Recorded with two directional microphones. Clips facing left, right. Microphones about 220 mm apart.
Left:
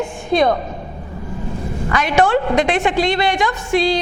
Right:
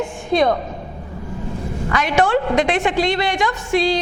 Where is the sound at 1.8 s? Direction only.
15° left (ahead or behind).